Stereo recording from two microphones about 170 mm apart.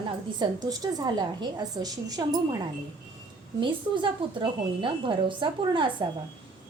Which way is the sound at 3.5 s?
30° right (ahead or behind).